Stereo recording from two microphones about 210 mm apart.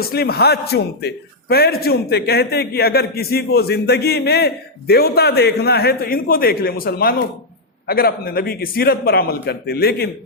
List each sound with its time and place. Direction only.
0.0 s a man's voice: 50° left (ahead or behind)